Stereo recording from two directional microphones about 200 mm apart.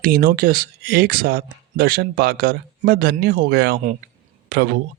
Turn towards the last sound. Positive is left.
turn(degrees=-50)  # may be behind; listen again after turning